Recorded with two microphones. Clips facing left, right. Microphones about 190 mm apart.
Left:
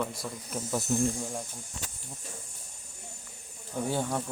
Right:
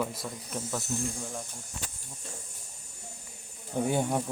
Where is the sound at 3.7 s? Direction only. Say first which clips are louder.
Right 3 dB; 15° right (ahead or behind).